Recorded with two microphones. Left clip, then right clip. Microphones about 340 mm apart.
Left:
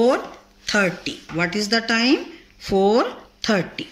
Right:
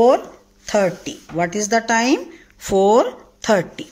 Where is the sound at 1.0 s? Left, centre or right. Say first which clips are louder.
Right 2 dB; right.